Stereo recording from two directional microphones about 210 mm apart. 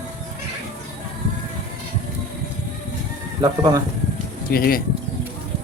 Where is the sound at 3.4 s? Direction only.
20° right (ahead or behind).